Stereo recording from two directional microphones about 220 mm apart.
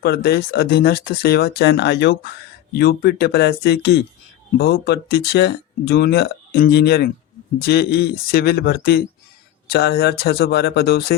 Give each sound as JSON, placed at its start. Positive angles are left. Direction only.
{"t": 0.0, "sound": "speech", "side_deg": 45}